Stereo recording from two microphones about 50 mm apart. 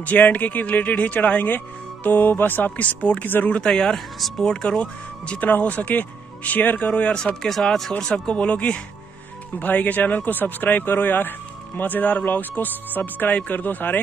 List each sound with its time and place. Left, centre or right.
0.0 s speech: left
3.6 s speech: centre
5.4 s speech: left
7.4 s speech: centre
8.1 s speech: left